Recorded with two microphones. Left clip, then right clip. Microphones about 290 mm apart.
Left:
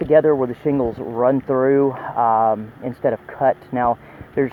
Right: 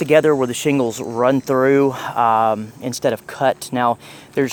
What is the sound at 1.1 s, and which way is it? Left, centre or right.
Speech, right.